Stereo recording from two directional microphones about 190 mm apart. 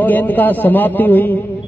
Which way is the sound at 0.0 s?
10° left (ahead or behind).